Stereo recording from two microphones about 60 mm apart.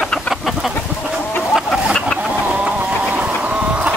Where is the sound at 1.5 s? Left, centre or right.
Centre.